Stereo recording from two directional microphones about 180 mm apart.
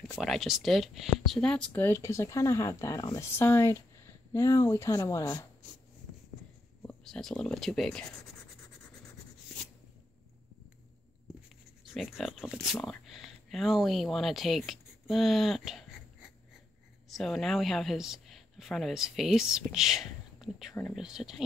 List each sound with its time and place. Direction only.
0.2 s speech: centre (ahead or behind); by 5.5 s 20° left (ahead or behind)
6.8 s speech: 5° left (ahead or behind)
11.8 s speech: centre (ahead or behind)